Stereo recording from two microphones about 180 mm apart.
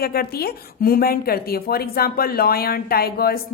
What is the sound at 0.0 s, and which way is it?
A woman's voice, 60° left (ahead or behind).